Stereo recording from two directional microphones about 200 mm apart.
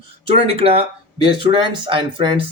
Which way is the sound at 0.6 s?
30° right (ahead or behind).